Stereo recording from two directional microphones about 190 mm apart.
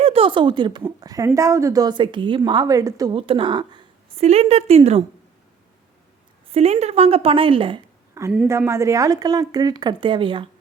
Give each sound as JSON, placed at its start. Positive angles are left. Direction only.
{"t": 0.0, "sound": "a woman's voice", "side_deg": -30}
{"t": 6.5, "sound": "a woman's voice", "side_deg": -35}
{"t": 8.3, "sound": "a woman's voice", "side_deg": -10}